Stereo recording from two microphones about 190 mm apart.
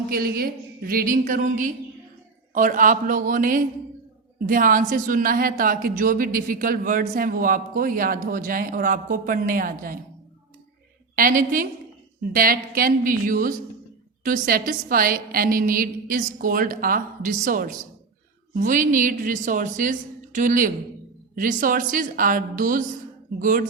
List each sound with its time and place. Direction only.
0.1 s a woman's voice: 50° right (ahead or behind)
11.1 s a woman's voice: 45° right (ahead or behind)